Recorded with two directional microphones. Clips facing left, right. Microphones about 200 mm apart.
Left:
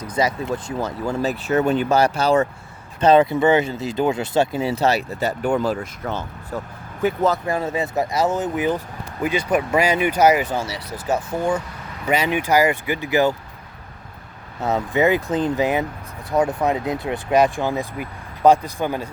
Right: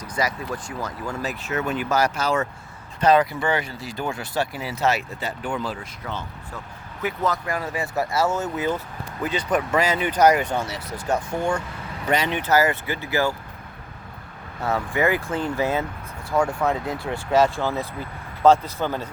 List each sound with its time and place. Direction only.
0.1 s speech: 25° left (ahead or behind); by 6.2 s 45° left (ahead or behind)
7.0 s speech: 30° left (ahead or behind)
14.6 s speech: 20° left (ahead or behind)